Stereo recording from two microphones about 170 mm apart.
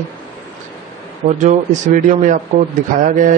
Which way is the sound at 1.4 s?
45° right (ahead or behind).